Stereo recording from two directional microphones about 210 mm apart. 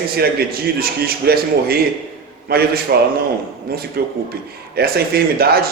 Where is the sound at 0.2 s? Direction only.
45° right (ahead or behind).